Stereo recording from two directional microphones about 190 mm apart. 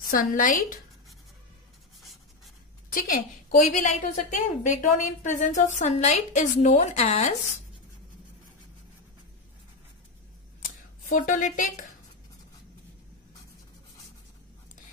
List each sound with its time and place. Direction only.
0.0 s a woman's voice: 45° left (ahead or behind)
2.0 s writing: centre (ahead or behind)
2.9 s a woman's voice: 45° left (ahead or behind)
11.1 s a woman's voice: 45° left (ahead or behind)